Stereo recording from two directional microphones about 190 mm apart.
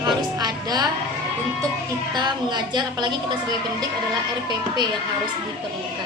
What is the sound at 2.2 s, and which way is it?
Speech, 20° right (ahead or behind).